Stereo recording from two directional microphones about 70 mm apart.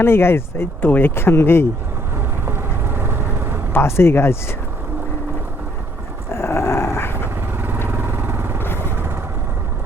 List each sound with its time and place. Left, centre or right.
0.0 s speech: left
2.5 s vehicle: right
3.7 s speech: left
6.3 s dog: left
7.9 s vehicle: right